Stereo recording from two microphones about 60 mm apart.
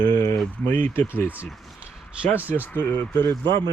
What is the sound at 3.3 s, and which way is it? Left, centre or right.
Speech, left.